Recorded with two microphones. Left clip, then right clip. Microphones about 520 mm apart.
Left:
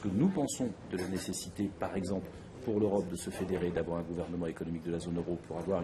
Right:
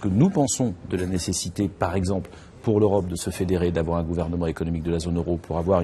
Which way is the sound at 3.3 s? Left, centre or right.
Right.